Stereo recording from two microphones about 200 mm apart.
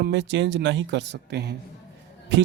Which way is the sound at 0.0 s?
60° right (ahead or behind).